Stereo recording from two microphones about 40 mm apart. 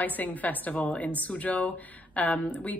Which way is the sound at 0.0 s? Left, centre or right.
Left.